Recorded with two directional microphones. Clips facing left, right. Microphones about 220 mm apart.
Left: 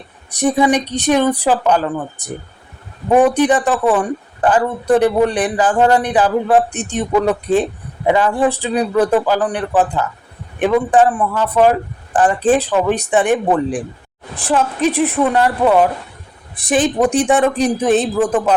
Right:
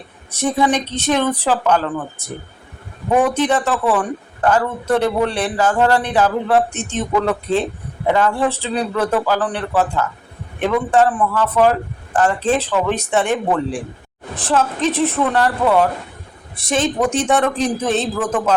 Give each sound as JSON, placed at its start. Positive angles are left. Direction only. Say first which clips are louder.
{"t": 0.3, "sound": "speech", "louder": "left 3 dB", "side_deg": 15}